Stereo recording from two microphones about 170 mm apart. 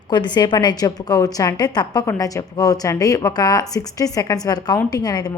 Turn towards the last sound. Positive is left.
turn(degrees=20)  # may be behind; listen again after turning